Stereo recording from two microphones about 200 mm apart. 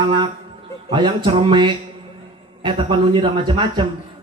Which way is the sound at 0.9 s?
25° right (ahead or behind).